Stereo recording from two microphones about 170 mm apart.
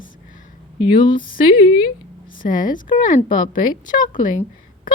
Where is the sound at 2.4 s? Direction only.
50° left (ahead or behind).